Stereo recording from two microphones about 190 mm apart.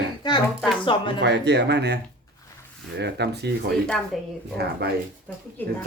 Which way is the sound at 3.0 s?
60° right (ahead or behind).